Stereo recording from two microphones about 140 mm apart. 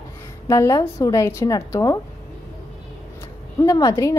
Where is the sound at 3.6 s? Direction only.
25° left (ahead or behind).